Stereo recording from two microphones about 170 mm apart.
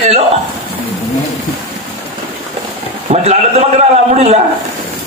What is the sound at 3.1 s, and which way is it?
A man's voice, 40° right (ahead or behind).